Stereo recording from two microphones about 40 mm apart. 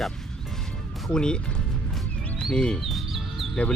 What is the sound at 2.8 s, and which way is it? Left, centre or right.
Chicken, centre.